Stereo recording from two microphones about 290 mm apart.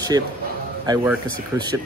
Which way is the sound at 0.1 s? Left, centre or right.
Centre.